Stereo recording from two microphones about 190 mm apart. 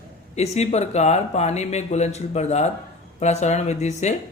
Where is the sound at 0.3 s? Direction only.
35° left (ahead or behind).